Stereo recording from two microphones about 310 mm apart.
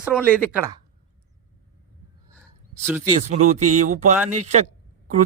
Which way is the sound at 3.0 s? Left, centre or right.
Right.